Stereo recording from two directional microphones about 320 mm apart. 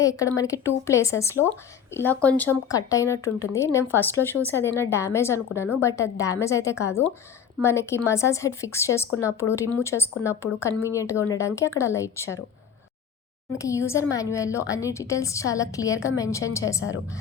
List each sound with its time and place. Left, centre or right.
0.0 s speech: centre
13.6 s speech: centre